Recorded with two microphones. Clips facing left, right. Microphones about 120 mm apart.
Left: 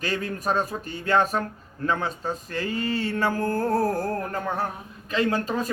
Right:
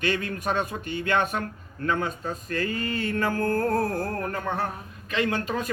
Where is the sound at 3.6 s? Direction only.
30° left (ahead or behind).